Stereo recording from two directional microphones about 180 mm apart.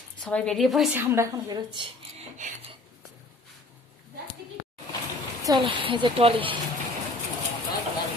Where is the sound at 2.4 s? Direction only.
45° right (ahead or behind).